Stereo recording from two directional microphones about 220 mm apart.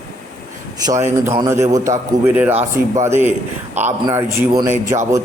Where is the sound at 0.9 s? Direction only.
15° right (ahead or behind).